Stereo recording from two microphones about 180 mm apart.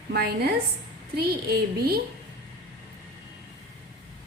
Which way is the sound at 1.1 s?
60° right (ahead or behind).